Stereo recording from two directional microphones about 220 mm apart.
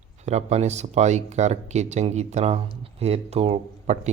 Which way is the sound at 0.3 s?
30° right (ahead or behind).